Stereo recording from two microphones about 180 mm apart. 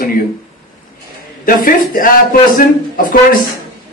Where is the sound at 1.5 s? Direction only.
50° left (ahead or behind).